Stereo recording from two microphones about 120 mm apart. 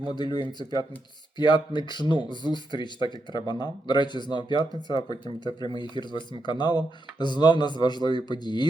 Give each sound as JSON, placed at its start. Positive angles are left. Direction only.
{"t": 0.2, "sound": "speech", "side_deg": 40}